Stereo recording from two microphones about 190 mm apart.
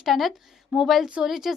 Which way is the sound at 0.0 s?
Centre (ahead or behind).